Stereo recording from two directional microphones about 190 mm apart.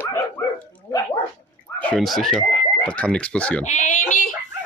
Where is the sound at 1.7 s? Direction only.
5° left (ahead or behind).